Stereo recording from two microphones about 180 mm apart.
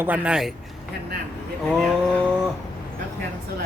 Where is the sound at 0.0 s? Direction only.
10° right (ahead or behind).